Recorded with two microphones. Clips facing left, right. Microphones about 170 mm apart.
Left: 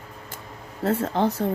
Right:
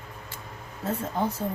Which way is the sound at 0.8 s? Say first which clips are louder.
Left 6 dB; 70° left (ahead or behind).